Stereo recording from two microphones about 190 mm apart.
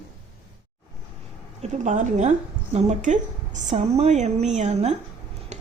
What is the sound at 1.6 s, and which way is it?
A woman's voice, 40° right (ahead or behind).